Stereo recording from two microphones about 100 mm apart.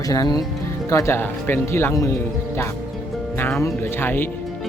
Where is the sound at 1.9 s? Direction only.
35° left (ahead or behind).